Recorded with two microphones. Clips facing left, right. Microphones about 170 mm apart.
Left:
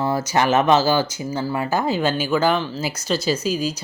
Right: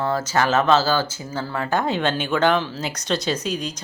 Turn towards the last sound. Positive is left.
turn(degrees=5)  # may be behind; listen again after turning